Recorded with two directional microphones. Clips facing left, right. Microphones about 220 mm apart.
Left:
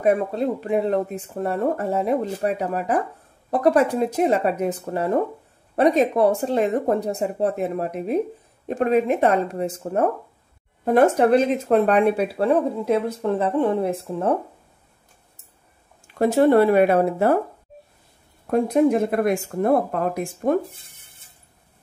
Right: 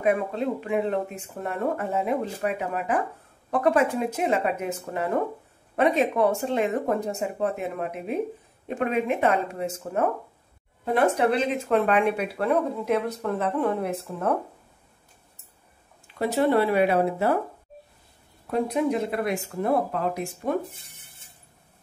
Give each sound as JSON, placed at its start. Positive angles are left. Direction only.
{"t": 0.0, "sound": "speech", "side_deg": 40}
{"t": 16.2, "sound": "speech", "side_deg": 45}
{"t": 18.5, "sound": "speech", "side_deg": 50}